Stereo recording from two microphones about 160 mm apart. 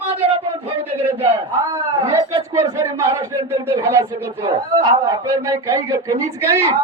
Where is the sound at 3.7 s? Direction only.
15° right (ahead or behind).